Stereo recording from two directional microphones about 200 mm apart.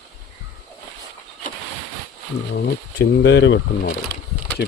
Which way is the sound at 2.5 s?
55° left (ahead or behind).